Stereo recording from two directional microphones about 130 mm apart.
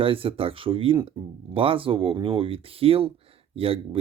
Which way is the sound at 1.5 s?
45° right (ahead or behind).